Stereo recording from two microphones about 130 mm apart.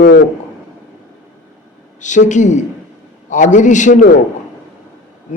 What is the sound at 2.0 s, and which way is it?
Speech, 70° left (ahead or behind).